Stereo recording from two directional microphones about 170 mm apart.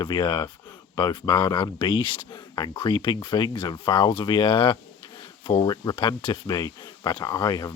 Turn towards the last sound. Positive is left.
turn(degrees=25)  # may be behind; listen again after turning